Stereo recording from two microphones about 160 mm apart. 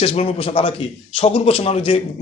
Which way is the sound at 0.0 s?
35° left (ahead or behind).